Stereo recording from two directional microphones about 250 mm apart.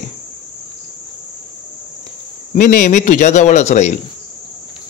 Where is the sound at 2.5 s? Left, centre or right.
Left.